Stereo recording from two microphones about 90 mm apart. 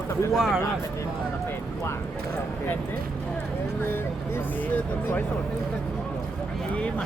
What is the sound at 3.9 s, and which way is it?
Speech, 25° left (ahead or behind).